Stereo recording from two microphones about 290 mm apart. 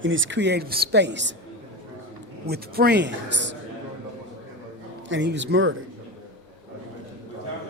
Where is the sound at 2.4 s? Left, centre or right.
Right.